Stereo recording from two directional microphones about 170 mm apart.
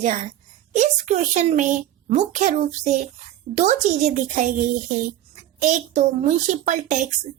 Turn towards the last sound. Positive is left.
turn(degrees=-45)  # may be behind; listen again after turning